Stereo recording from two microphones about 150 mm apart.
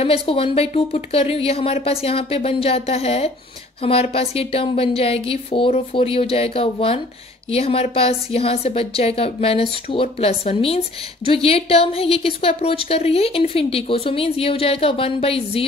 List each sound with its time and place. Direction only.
0.0 s a woman's voice: 40° left (ahead or behind)